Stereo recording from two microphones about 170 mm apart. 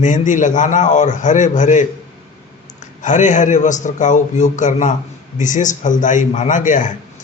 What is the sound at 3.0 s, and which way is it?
A man's voice, 45° left (ahead or behind).